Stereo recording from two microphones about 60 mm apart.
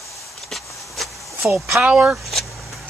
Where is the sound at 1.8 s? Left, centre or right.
Centre.